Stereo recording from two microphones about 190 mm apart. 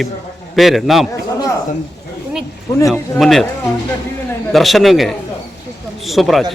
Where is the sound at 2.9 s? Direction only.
Centre (ahead or behind).